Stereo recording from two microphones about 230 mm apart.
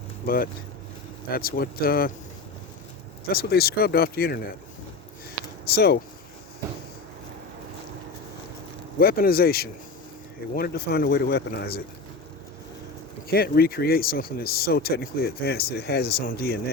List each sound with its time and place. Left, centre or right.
1.3 s speech: left
3.2 s speech: left
5.6 s speech: left
9.0 s speech: left
13.2 s speech: left